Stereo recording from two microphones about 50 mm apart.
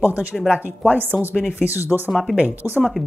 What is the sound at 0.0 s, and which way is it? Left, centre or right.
Speech, right.